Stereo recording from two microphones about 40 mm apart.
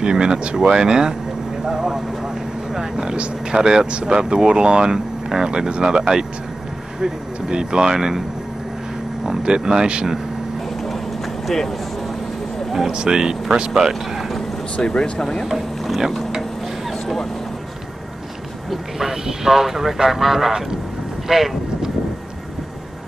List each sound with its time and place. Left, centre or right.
0.0 s speech: right
1.7 s vehicle: centre
2.7 s speech: centre
9.2 s speech: centre
11.4 s speech: centre
12.9 s speech: centre
14.8 s speech: left
15.4 s a sound: centre
18.7 s speech: centre